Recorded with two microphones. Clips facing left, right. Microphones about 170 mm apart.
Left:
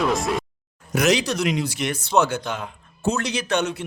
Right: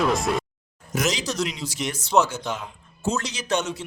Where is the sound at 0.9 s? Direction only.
65° left (ahead or behind).